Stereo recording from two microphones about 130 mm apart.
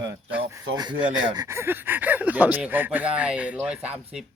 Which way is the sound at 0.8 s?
35° right (ahead or behind).